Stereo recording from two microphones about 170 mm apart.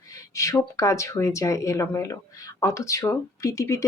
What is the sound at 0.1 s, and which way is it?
Speech, 20° left (ahead or behind).